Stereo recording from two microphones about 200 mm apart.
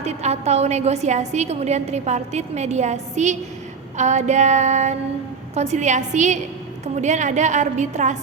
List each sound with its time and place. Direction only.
0.0 s a woman's voice: 35° right (ahead or behind)